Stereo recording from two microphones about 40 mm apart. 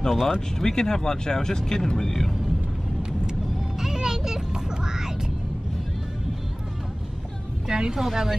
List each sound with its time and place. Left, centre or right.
0.0 s speech: centre
3.8 s music: centre
7.6 s speech: right
7.9 s speech: centre